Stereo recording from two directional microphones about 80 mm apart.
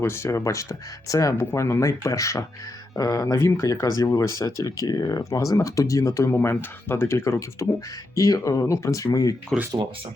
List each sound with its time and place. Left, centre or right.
0.0 s speech: left
1.4 s speech: left
3.3 s speech: left
6.3 s speech: left
9.0 s speech: left
9.5 s speech: centre